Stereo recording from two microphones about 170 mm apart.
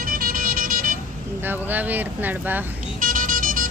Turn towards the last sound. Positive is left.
turn(degrees=-55)  # may be behind; listen again after turning